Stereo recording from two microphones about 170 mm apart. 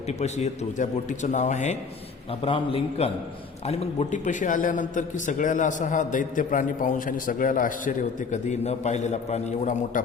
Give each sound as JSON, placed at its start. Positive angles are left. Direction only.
{"t": 0.1, "sound": "a man's voice", "side_deg": 40}
{"t": 2.4, "sound": "a man's voice", "side_deg": 35}